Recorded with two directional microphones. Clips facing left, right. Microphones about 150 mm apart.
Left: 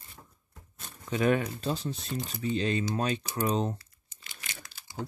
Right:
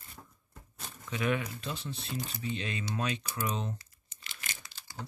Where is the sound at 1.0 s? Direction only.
35° left (ahead or behind).